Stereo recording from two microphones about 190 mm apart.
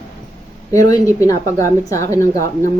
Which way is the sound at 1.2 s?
15° left (ahead or behind).